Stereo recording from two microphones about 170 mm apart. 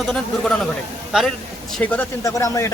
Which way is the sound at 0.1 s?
Centre (ahead or behind).